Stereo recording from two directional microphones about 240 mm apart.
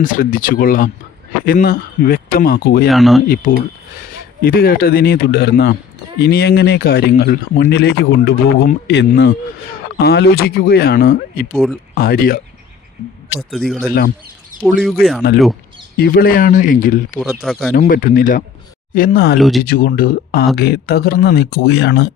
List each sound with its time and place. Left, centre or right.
0.0 s speech: left
2.9 s speech: centre
3.2 s speech: left
11.5 s speech: centre
11.9 s speech: left
13.5 s speech: centre
16.0 s speech: left
17.2 s speech: centre
17.7 s speech: left
19.4 s speech: centre
19.6 s speech: left